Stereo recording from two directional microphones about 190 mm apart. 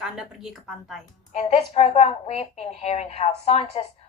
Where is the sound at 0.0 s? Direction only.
Centre (ahead or behind).